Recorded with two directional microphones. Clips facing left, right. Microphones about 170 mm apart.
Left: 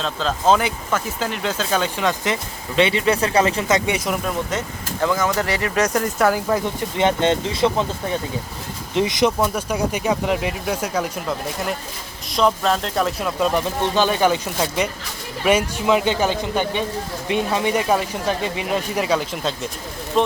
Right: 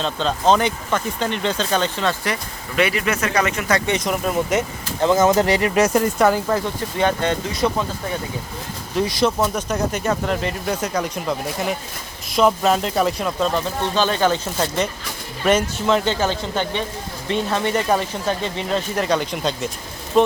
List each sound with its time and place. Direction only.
0.0 s speech: centre (ahead or behind); by 3.8 s 30° left (ahead or behind)
3.8 s speech: 10° left (ahead or behind)
4.9 s speech: 25° right (ahead or behind)
5.7 s speech: 5° right (ahead or behind)
6.5 s speech: 20° left (ahead or behind)
9.0 s speech: 20° left (ahead or behind)
9.4 s speech: 10° left (ahead or behind)